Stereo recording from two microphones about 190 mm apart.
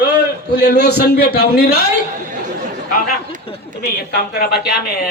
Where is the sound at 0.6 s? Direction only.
60° left (ahead or behind).